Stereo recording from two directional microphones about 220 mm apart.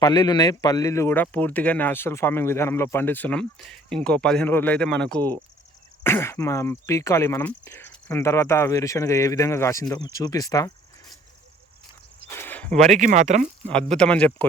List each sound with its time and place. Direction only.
0.0 s speech: 20° left (ahead or behind)
12.3 s a sound: 10° left (ahead or behind)
12.8 s speech: 35° right (ahead or behind)
13.7 s speech: 5° left (ahead or behind)